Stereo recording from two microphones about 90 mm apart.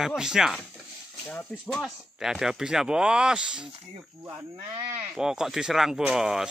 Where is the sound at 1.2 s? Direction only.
20° left (ahead or behind).